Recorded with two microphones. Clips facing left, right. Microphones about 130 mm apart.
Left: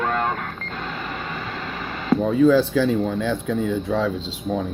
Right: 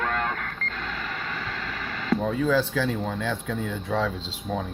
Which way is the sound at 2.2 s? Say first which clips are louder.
Left 9 dB; 40° left (ahead or behind).